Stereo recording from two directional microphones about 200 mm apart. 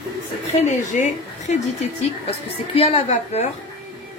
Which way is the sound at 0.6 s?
35° left (ahead or behind).